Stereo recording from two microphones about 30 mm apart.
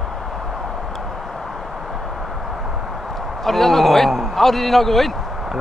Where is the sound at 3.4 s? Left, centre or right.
Centre.